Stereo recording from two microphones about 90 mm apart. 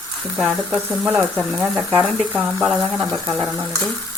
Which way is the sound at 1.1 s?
10° right (ahead or behind).